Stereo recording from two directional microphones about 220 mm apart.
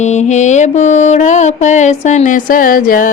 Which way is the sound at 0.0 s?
30° left (ahead or behind).